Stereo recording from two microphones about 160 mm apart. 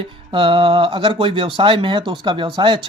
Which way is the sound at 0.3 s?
35° right (ahead or behind).